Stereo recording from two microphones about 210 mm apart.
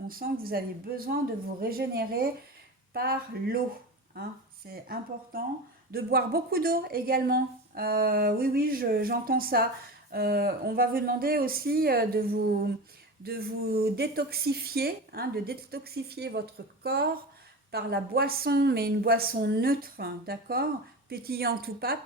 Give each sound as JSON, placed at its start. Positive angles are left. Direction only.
{"t": 0.1, "sound": "a woman's voice", "side_deg": -45}
{"t": 4.7, "sound": "a woman's voice", "side_deg": -45}